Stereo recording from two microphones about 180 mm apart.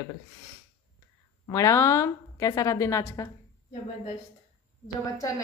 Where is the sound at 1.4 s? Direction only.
15° left (ahead or behind).